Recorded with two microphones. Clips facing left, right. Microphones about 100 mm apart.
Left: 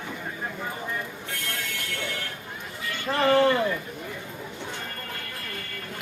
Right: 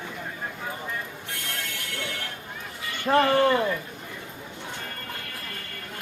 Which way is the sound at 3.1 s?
50° right (ahead or behind).